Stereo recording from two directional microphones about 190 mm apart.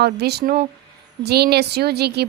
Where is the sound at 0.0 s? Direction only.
60° right (ahead or behind).